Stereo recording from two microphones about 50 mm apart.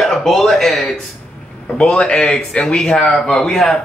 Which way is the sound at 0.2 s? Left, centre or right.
Centre.